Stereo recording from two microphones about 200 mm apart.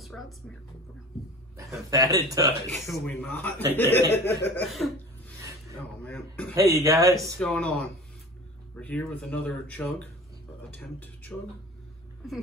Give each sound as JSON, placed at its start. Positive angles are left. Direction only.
{"t": 0.1, "sound": "speech", "side_deg": 5}
{"t": 1.9, "sound": "speech", "side_deg": -15}
{"t": 2.6, "sound": "speech", "side_deg": 5}
{"t": 4.1, "sound": "speech", "side_deg": 55}
{"t": 6.0, "sound": "speech", "side_deg": 10}
{"t": 6.5, "sound": "speech", "side_deg": -15}
{"t": 7.3, "sound": "speech", "side_deg": 5}
{"t": 8.7, "sound": "speech", "side_deg": 5}